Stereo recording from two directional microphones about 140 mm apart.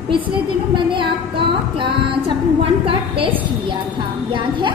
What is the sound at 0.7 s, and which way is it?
Female singing, 35° right (ahead or behind).